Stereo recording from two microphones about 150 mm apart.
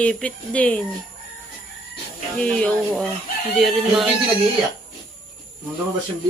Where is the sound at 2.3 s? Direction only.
5° left (ahead or behind).